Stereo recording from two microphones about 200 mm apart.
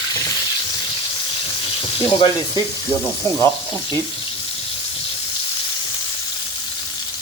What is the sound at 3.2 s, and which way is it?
Sizzle, 15° left (ahead or behind).